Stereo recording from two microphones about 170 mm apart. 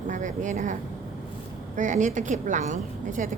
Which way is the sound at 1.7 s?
45° right (ahead or behind).